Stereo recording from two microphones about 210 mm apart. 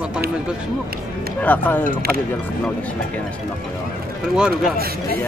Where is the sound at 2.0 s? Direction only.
45° right (ahead or behind).